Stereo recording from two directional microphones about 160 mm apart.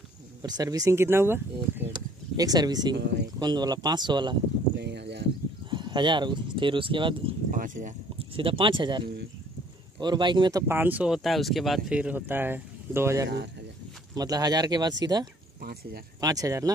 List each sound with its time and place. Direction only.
0.4 s speech: 25° right (ahead or behind)
1.9 s a sound: 25° right (ahead or behind)
3.3 s speech: 25° right (ahead or behind)
4.7 s a sound: 90° right
5.7 s speech: 30° right (ahead or behind)
7.5 s speech: 55° right (ahead or behind)
8.2 s speech: 35° right (ahead or behind)
10.7 s speech: 10° right (ahead or behind)
15.6 s speech: 75° right (ahead or behind)
16.2 s speech: 20° right (ahead or behind)